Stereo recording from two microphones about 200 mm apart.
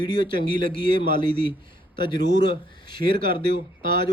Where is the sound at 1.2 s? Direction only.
25° left (ahead or behind).